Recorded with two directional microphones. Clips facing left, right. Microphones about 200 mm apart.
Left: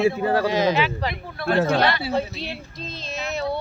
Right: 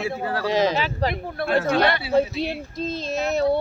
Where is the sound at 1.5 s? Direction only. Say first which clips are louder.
Even; 50° right (ahead or behind).